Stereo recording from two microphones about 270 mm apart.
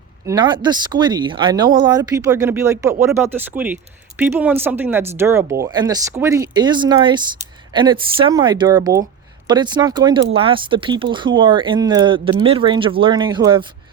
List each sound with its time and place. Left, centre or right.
0.3 s speech: centre